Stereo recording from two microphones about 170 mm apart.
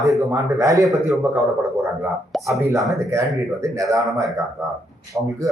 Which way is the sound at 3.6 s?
20° right (ahead or behind).